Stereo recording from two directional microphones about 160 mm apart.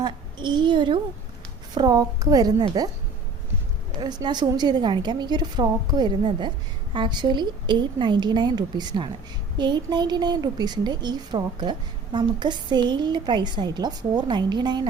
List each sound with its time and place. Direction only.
0.0 s a woman's voice: 30° right (ahead or behind)
3.9 s a woman's voice: 25° right (ahead or behind)